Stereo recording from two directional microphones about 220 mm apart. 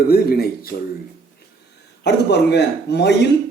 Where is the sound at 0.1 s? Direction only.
45° left (ahead or behind).